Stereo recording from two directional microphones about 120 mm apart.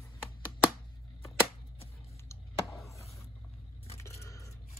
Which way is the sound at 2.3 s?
25° left (ahead or behind).